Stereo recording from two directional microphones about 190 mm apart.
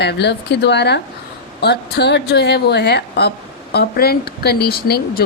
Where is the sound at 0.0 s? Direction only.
65° left (ahead or behind).